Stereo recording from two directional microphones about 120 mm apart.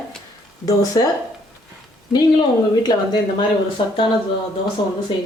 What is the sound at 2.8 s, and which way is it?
Speech, 35° left (ahead or behind).